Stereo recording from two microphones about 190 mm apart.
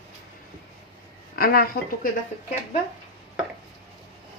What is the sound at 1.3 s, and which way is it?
Speech, 50° left (ahead or behind).